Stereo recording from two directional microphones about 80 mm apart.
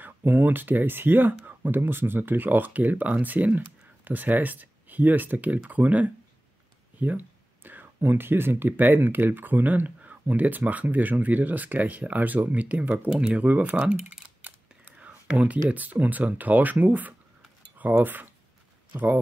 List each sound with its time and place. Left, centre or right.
0.0 s speech: right